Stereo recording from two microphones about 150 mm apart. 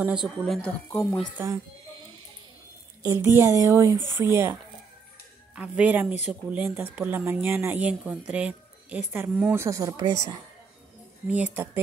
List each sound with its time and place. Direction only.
0.0 s speech: 5° right (ahead or behind)
0.6 s speech: 10° left (ahead or behind)
3.0 s speech: 20° right (ahead or behind)
5.6 s speech: 10° right (ahead or behind)
9.6 s speech: 20° right (ahead or behind)
11.2 s speech: 10° right (ahead or behind)